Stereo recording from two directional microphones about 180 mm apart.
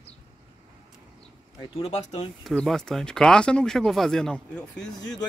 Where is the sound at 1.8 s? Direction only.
35° left (ahead or behind).